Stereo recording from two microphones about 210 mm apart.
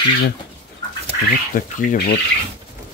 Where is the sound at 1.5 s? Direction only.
40° left (ahead or behind).